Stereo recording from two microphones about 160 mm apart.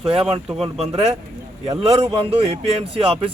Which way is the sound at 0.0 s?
35° right (ahead or behind).